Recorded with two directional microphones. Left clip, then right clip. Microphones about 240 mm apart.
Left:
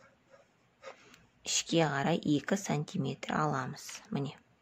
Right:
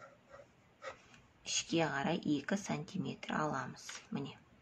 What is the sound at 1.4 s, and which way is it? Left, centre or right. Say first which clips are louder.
Speech: left 5 dB; left.